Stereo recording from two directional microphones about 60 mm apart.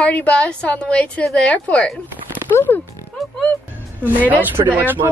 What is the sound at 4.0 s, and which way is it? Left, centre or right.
A woman's voice, right.